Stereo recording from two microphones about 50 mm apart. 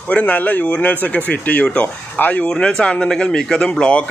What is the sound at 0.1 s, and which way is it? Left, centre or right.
Speech, left.